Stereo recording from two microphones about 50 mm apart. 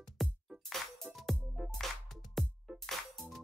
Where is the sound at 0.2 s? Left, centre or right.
Centre.